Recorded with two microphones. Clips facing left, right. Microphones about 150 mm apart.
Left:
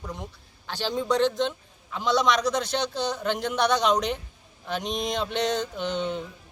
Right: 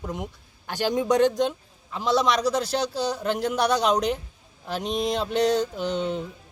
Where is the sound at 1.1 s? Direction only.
45° right (ahead or behind).